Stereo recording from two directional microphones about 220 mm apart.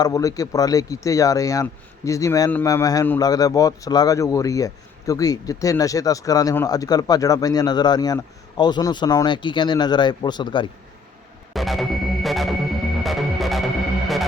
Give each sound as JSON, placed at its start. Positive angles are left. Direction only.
{"t": 0.0, "sound": "speech", "side_deg": 15}
{"t": 11.5, "sound": "music", "side_deg": 0}